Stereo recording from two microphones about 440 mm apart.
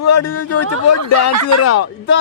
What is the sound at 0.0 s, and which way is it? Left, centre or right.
Speech, left.